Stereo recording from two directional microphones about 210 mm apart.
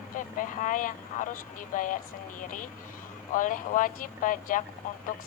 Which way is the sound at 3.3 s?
40° left (ahead or behind).